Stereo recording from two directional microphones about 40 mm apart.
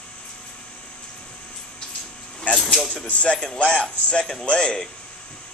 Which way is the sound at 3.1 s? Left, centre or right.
Left.